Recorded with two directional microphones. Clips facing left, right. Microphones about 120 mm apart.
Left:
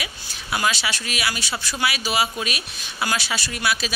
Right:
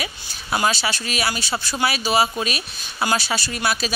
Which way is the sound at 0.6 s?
35° right (ahead or behind).